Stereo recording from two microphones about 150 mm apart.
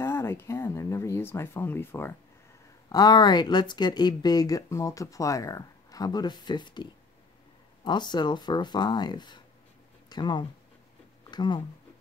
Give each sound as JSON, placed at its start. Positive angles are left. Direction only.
{"t": 0.0, "sound": "speech", "side_deg": 15}
{"t": 2.9, "sound": "speech", "side_deg": 25}